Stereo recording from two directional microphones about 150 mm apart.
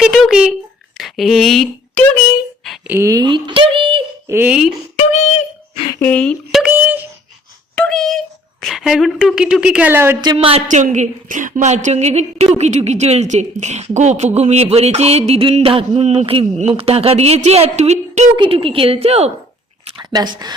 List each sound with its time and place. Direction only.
0.0 s speech: centre (ahead or behind)
2.8 s speech: 15° right (ahead or behind); by 4.0 s 35° right (ahead or behind)
4.3 s speech: 10° right (ahead or behind)
4.9 s a sound: 50° left (ahead or behind)
6.0 s speech: 10° left (ahead or behind)
6.6 s a sound: 10° right (ahead or behind)
7.8 s a child's voice: 5° left (ahead or behind); by 10.2 s 15° right (ahead or behind)
10.3 s speech: 45° right (ahead or behind)
18.3 s a woman's voice: 35° right (ahead or behind)
20.1 s speech: 30° right (ahead or behind)